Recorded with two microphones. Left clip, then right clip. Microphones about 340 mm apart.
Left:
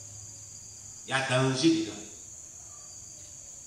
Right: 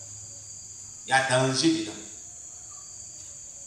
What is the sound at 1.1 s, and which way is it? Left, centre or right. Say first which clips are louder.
Speech: right 5 dB; centre.